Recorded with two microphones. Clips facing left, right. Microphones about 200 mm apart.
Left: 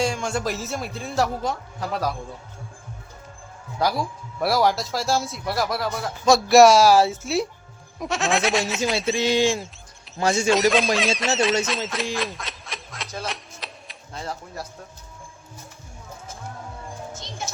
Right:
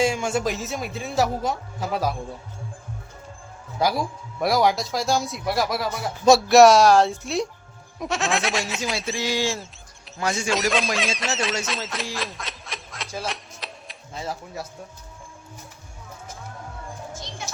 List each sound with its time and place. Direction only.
0.0 s speech: 5° right (ahead or behind)
4.4 s speech: centre (ahead or behind)
9.1 s speech: 20° left (ahead or behind)
10.5 s speech: centre (ahead or behind)